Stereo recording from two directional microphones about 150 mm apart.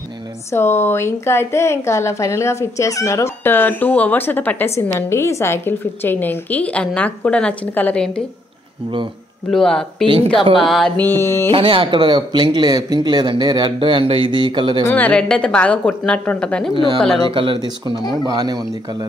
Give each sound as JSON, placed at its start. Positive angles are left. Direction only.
{"t": 0.5, "sound": "a woman's voice", "side_deg": 15}
{"t": 9.5, "sound": "speech", "side_deg": 5}
{"t": 11.0, "sound": "a woman's voice", "side_deg": 15}
{"t": 11.5, "sound": "speech", "side_deg": -35}
{"t": 14.9, "sound": "a woman's voice", "side_deg": 10}
{"t": 17.3, "sound": "speech", "side_deg": -35}